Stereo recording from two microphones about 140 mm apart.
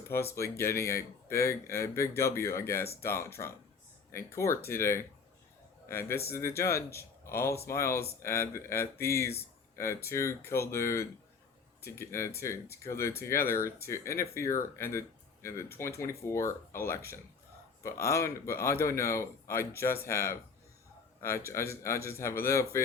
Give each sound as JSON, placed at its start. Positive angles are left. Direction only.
{"t": 0.3, "sound": "speech", "side_deg": 20}